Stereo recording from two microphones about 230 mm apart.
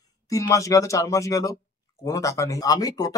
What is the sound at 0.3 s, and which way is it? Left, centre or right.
Speech, centre.